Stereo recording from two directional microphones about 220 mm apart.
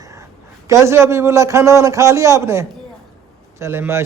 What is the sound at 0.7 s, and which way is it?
A man's voice, 10° right (ahead or behind).